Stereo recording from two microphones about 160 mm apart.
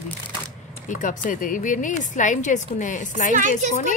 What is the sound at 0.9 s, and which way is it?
A woman's voice, 55° left (ahead or behind).